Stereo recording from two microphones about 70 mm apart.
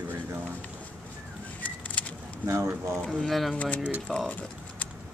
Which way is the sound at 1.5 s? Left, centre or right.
Left.